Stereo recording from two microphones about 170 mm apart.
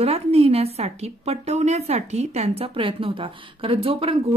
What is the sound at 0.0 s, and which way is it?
Speech, 35° right (ahead or behind).